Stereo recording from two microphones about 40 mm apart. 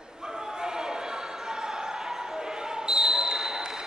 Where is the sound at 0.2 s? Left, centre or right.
Centre.